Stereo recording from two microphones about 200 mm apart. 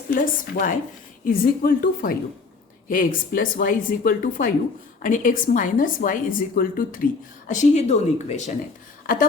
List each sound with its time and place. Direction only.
0.1 s speech: 45° left (ahead or behind)